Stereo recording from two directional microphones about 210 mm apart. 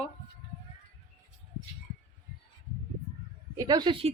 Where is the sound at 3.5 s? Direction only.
15° right (ahead or behind).